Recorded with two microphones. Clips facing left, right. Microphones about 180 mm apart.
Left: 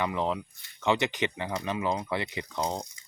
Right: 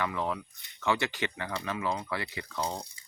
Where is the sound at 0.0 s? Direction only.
20° left (ahead or behind).